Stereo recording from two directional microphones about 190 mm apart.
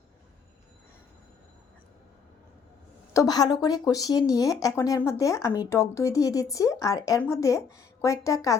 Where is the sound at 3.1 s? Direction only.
20° left (ahead or behind).